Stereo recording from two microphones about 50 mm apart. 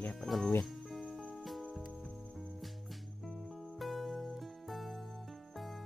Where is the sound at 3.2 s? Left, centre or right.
Centre.